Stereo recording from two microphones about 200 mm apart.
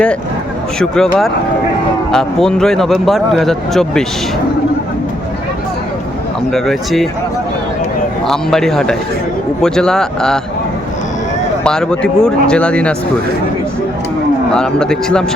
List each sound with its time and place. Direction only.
0.8 s speech: 5° left (ahead or behind)
6.5 s speech: centre (ahead or behind)
8.3 s speech: centre (ahead or behind)
11.6 s speech: 5° left (ahead or behind)
14.5 s speech: 5° left (ahead or behind)